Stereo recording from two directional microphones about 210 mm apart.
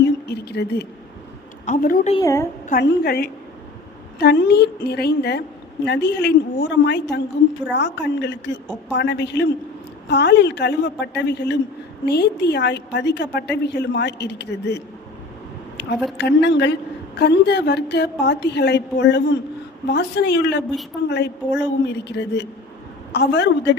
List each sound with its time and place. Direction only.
0.3 s speech: 50° left (ahead or behind)
1.6 s a woman's voice: 40° left (ahead or behind)
2.2 s a woman's voice: 10° left (ahead or behind)
2.6 s a woman's voice: 45° left (ahead or behind)
15.8 s a woman's voice: 55° left (ahead or behind)